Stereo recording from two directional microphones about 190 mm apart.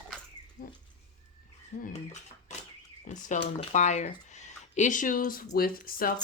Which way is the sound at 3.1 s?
40° left (ahead or behind).